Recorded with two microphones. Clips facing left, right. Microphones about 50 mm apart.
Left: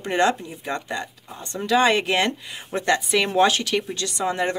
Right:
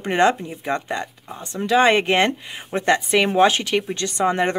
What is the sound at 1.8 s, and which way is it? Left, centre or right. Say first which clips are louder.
Speech: right 4 dB; right.